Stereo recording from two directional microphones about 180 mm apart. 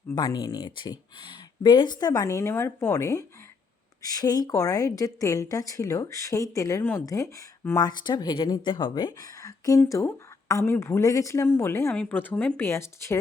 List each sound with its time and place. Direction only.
0.1 s a woman's voice: 20° left (ahead or behind)